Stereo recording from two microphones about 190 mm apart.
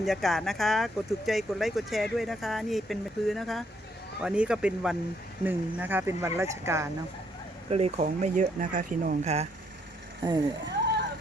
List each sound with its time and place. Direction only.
0.0 s speech: centre (ahead or behind)
7.7 s speech: 35° right (ahead or behind)
10.2 s speech: 20° right (ahead or behind)